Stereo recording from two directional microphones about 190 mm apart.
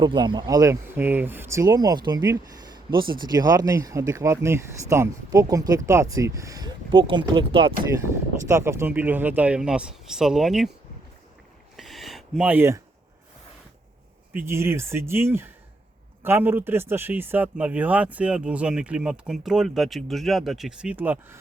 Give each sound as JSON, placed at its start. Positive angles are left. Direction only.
{"t": 0.0, "sound": "speech", "side_deg": -25}
{"t": 8.4, "sound": "speech", "side_deg": -15}
{"t": 11.8, "sound": "a sound", "side_deg": 0}
{"t": 14.3, "sound": "speech", "side_deg": -15}